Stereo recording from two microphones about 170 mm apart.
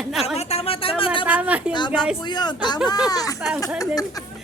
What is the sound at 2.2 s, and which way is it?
Speech, 25° left (ahead or behind).